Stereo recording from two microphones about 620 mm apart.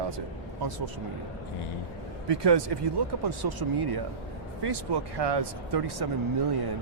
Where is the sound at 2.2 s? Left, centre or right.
Right.